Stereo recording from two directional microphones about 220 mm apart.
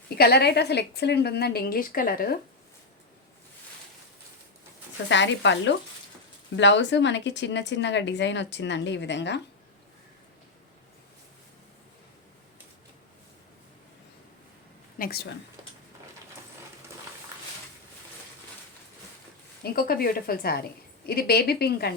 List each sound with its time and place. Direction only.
0.2 s speech: 45° left (ahead or behind)
5.0 s speech: 55° left (ahead or behind)
14.9 s speech: 45° left (ahead or behind)
19.6 s speech: 40° left (ahead or behind)